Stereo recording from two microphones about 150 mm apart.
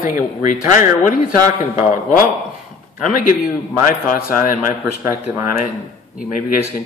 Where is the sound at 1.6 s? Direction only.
60° left (ahead or behind).